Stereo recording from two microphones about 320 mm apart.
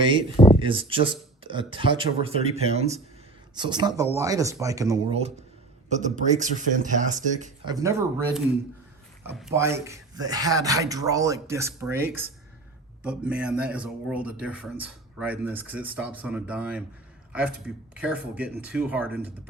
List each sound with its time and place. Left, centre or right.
0.0 s speech: centre